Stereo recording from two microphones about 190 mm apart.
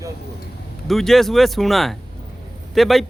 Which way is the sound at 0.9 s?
Centre (ahead or behind).